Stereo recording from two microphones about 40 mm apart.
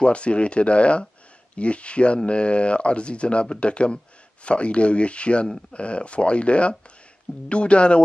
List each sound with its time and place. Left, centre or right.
0.0 s speech: left